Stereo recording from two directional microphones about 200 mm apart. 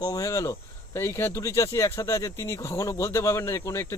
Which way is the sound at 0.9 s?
10° left (ahead or behind).